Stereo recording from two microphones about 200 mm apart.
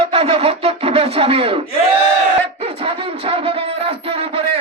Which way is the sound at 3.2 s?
30° right (ahead or behind).